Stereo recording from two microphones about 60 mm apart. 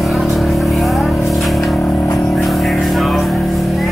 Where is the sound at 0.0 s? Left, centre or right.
Centre.